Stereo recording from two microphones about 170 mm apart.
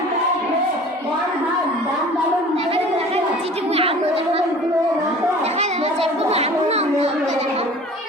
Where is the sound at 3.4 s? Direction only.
35° right (ahead or behind).